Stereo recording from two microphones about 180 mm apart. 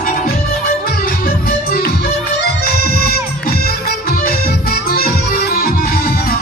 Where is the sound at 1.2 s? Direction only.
60° left (ahead or behind).